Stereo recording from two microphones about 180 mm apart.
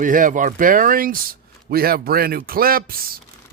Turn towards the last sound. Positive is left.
turn(degrees=-55)  # may be behind; listen again after turning